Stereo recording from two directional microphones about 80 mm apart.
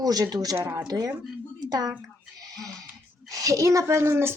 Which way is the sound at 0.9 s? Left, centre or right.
Right.